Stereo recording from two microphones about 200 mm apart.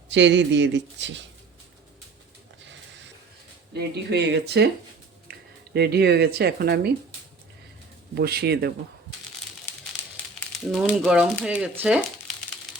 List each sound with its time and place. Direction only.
0.1 s speech: 65° right (ahead or behind)
3.8 s speech: 60° right (ahead or behind)
5.3 s a sound: 45° right (ahead or behind)
5.7 s speech: 55° right (ahead or behind)
8.1 s speech: 50° right (ahead or behind)
10.7 s speech: centre (ahead or behind)